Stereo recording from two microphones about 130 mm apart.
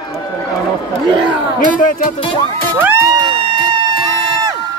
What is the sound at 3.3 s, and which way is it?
Music, 40° right (ahead or behind).